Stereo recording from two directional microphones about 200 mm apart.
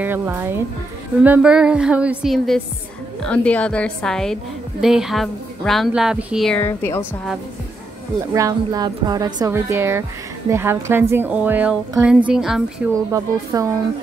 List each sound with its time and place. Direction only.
0.0 s a woman's voice: 10° right (ahead or behind); by 7.1 s 15° left (ahead or behind)
8.3 s a woman's voice: 15° right (ahead or behind)
12.9 s a woman's voice: 15° right (ahead or behind)